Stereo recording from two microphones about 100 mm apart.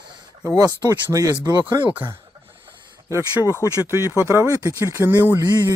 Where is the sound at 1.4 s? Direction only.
50° right (ahead or behind).